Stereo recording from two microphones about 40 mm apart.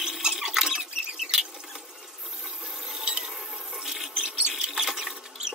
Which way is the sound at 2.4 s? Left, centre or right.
Centre.